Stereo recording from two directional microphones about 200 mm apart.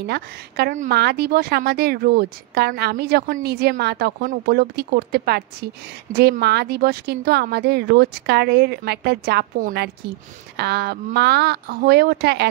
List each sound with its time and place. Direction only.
0.0 s a woman's voice: 50° right (ahead or behind)